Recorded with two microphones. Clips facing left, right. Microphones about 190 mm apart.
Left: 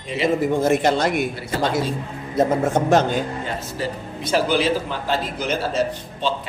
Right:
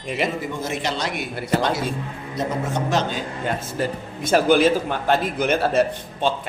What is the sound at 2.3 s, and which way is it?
Speech, 50° left (ahead or behind).